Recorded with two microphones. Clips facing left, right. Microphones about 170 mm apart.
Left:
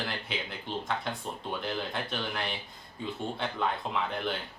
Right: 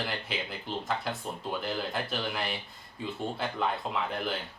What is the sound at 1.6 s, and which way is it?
Speech, 5° right (ahead or behind).